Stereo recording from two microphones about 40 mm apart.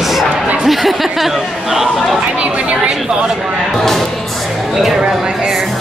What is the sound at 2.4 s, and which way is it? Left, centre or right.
Chatter, right.